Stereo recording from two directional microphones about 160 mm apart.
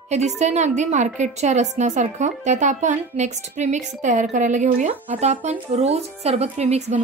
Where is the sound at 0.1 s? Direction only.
45° right (ahead or behind).